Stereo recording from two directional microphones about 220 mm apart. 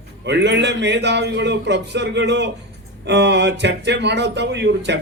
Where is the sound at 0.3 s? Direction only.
50° right (ahead or behind).